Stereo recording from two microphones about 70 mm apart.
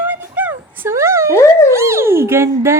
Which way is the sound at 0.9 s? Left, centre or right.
Right.